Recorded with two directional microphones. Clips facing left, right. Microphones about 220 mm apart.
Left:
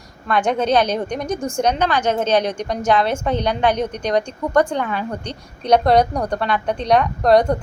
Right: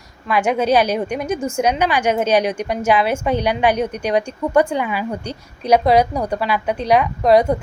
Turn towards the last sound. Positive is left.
turn(degrees=-5)  # may be behind; listen again after turning